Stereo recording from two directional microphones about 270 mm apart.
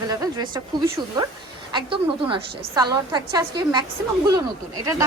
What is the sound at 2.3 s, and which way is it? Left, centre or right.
A woman's voice, centre.